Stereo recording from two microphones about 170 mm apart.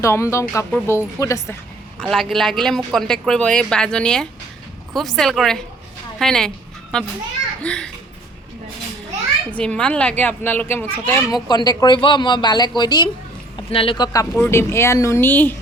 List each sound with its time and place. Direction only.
0.0 s speech: 15° left (ahead or behind)
2.0 s a woman's voice: centre (ahead or behind)
7.6 s a woman's voice: 5° left (ahead or behind)
9.5 s speech: 5° left (ahead or behind)